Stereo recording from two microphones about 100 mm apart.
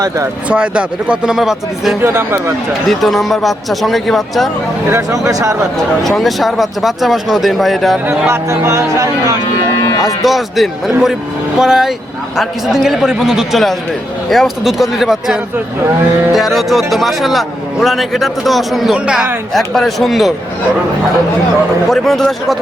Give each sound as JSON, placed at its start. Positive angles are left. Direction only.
{"t": 0.4, "sound": "speech", "side_deg": -10}
{"t": 2.0, "sound": "speech", "side_deg": -25}
{"t": 2.9, "sound": "speech", "side_deg": 0}
{"t": 4.9, "sound": "speech", "side_deg": -30}
{"t": 6.0, "sound": "speech", "side_deg": 0}
{"t": 8.3, "sound": "speech", "side_deg": -30}
{"t": 9.8, "sound": "speech", "side_deg": 35}
{"t": 10.2, "sound": "speech", "side_deg": 0}
{"t": 18.9, "sound": "speech", "side_deg": -10}
{"t": 19.5, "sound": "speech", "side_deg": 0}
{"t": 21.8, "sound": "speech", "side_deg": 5}